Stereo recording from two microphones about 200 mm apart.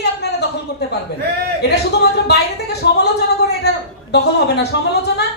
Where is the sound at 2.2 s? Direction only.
55° left (ahead or behind).